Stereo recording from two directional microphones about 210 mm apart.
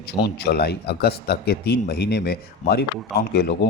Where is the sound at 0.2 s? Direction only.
50° left (ahead or behind).